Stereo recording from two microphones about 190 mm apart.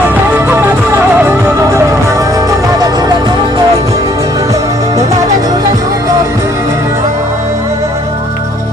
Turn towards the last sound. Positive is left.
turn(degrees=-15)  # may be behind; listen again after turning